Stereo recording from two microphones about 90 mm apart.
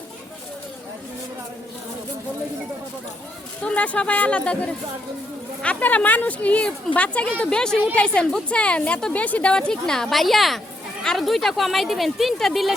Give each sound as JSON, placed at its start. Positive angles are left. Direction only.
{"t": 3.6, "sound": "a woman's voice", "side_deg": 15}